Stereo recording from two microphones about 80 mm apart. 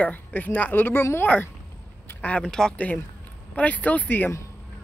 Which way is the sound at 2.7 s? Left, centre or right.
Centre.